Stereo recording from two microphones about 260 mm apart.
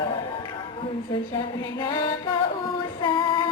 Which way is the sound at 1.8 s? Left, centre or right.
Centre.